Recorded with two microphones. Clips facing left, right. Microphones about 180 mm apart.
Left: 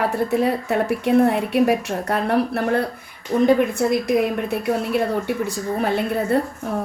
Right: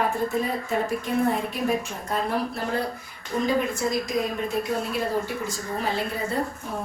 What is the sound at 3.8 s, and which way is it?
Speech, 65° left (ahead or behind).